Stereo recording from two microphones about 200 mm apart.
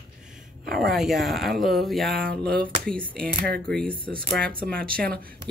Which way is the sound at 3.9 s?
45° right (ahead or behind).